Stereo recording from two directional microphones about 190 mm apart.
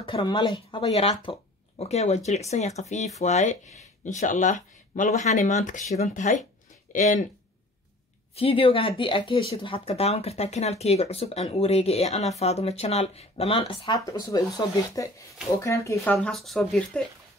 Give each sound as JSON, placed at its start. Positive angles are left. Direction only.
{"t": 0.0, "sound": "speech", "side_deg": 25}
{"t": 8.4, "sound": "speech", "side_deg": 30}